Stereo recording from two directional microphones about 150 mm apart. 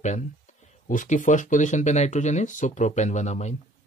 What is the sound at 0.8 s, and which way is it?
Speech, 60° left (ahead or behind).